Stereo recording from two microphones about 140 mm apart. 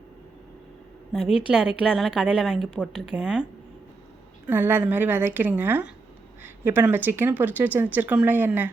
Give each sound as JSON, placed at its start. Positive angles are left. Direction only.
{"t": 1.5, "sound": "a woman's voice", "side_deg": -5}
{"t": 4.4, "sound": "speech", "side_deg": -15}